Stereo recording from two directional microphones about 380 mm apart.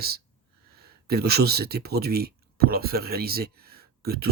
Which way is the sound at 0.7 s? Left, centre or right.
Right.